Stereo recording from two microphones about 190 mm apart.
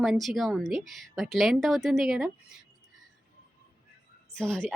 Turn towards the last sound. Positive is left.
turn(degrees=5)  # may be behind; listen again after turning